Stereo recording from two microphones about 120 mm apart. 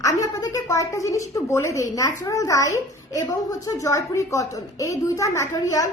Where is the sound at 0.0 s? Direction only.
30° left (ahead or behind).